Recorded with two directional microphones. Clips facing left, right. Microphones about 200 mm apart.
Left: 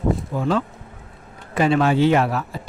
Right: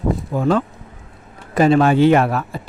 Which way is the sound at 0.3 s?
50° right (ahead or behind).